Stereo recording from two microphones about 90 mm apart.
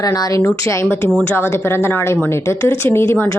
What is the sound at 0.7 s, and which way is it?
A woman's voice, 30° left (ahead or behind).